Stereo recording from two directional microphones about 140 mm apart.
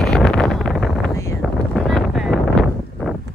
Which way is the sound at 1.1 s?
20° left (ahead or behind).